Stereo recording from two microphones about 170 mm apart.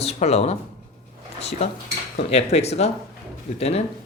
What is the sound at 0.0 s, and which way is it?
Speech, 40° left (ahead or behind).